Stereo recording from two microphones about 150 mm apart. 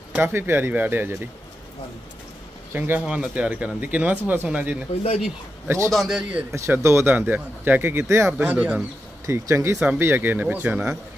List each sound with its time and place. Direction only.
0.1 s speech: 15° right (ahead or behind)
2.7 s speech: 10° right (ahead or behind)
5.9 s a man's voice: centre (ahead or behind)
6.5 s speech: 20° right (ahead or behind)